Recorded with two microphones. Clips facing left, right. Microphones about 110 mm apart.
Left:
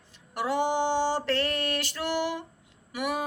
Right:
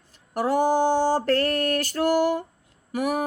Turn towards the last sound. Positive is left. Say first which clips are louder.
# right 5 dB
turn(degrees=-40)  # may be behind; listen again after turning